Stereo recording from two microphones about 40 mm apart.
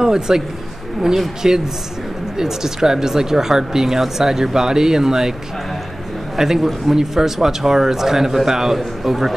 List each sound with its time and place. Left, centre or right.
0.0 s a man's voice: centre
1.4 s a man's voice: centre
6.3 s a man's voice: centre